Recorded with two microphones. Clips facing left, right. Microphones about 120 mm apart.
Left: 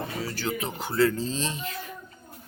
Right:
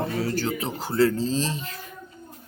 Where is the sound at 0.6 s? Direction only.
35° right (ahead or behind).